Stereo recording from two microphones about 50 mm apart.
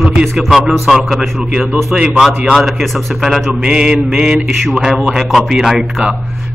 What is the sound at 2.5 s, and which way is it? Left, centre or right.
Speech, centre.